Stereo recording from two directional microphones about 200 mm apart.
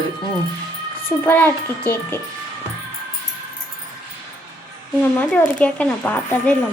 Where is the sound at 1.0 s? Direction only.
10° left (ahead or behind).